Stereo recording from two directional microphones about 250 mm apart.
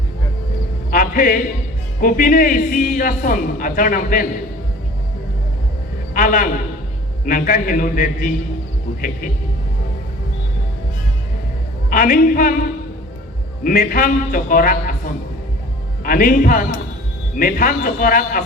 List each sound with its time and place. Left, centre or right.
0.9 s a sound: left
2.0 s a man's voice: left
6.1 s a man's voice: left
11.9 s a man's voice: left
13.7 s a man's voice: left
16.0 s a man's voice: left